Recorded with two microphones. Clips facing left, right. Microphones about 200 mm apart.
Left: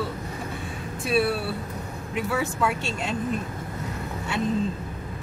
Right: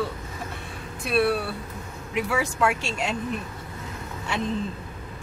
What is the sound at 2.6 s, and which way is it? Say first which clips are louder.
Speech: right 2 dB; 70° right (ahead or behind).